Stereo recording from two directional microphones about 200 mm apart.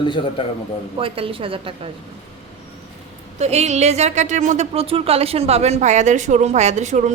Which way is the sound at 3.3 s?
35° right (ahead or behind).